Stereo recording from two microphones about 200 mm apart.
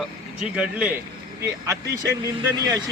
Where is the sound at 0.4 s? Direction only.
5° right (ahead or behind).